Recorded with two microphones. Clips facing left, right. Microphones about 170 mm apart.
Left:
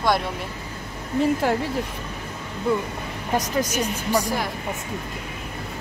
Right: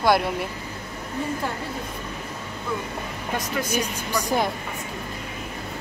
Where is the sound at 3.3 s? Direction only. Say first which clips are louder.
Left 3 dB; 40° left (ahead or behind).